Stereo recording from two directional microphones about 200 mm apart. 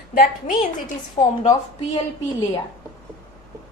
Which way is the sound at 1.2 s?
25° left (ahead or behind).